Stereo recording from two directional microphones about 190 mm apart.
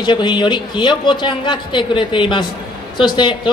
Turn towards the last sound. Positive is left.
turn(degrees=25)  # may be behind; listen again after turning